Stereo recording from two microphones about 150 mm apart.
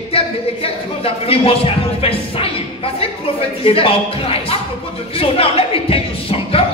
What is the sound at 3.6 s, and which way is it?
A man's voice, 40° left (ahead or behind).